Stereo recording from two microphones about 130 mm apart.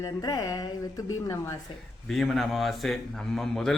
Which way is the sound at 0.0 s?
30° left (ahead or behind).